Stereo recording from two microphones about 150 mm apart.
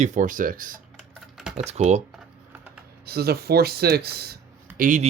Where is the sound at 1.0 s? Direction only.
5° right (ahead or behind).